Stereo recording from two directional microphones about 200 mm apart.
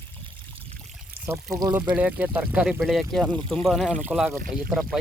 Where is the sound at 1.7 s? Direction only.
5° right (ahead or behind).